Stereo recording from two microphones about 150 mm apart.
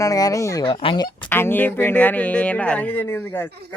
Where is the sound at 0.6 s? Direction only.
35° left (ahead or behind).